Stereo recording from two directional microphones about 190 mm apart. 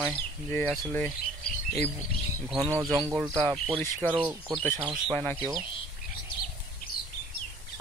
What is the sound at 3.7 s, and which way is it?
Speech, 10° left (ahead or behind).